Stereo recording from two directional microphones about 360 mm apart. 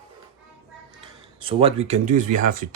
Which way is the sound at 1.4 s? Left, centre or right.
Centre.